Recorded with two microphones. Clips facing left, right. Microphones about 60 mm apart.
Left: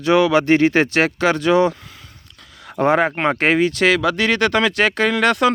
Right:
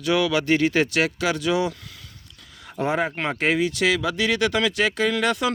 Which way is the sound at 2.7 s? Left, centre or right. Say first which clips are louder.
Left 7 dB; left.